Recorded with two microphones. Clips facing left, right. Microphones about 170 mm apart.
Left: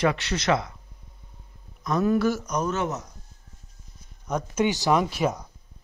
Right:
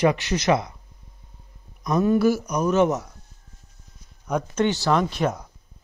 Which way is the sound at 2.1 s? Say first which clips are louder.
Right 3 dB; 10° right (ahead or behind).